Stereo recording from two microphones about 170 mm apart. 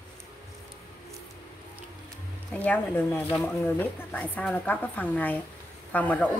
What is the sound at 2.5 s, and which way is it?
Speech, 10° left (ahead or behind).